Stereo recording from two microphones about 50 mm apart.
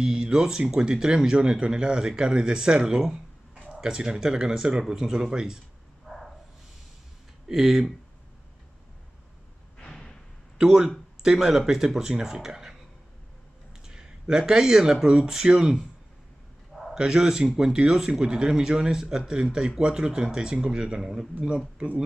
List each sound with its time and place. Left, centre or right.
0.0 s speech: centre
6.0 s a sound: centre
7.4 s speech: centre
9.8 s a sound: centre
10.6 s speech: centre
13.8 s speech: centre
16.9 s speech: centre
21.7 s speech: right